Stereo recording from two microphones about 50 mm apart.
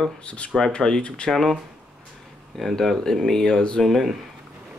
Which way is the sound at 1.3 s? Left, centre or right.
Centre.